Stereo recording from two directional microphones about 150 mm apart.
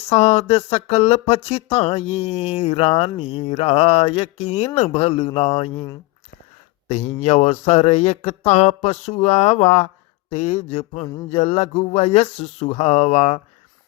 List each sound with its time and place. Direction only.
0.1 s speech: 45° left (ahead or behind)
6.8 s speech: 45° left (ahead or behind)